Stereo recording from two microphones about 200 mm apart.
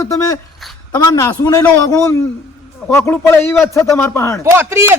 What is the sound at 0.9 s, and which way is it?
A man's voice, 20° left (ahead or behind).